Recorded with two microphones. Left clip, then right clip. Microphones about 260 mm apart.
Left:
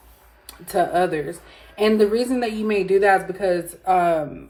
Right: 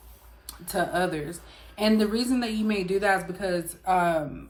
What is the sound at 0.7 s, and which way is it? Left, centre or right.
A woman's voice, centre.